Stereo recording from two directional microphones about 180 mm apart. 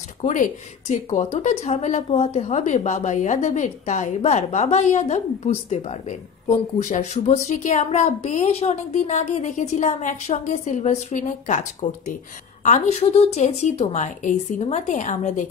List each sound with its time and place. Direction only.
0.2 s a woman's voice: 45° left (ahead or behind)